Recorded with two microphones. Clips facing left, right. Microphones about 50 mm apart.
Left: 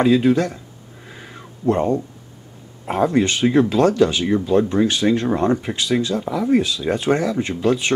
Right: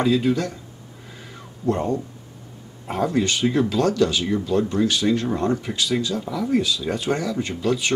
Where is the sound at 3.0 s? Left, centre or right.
Left.